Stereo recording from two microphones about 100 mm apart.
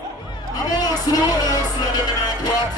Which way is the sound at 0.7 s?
40° left (ahead or behind).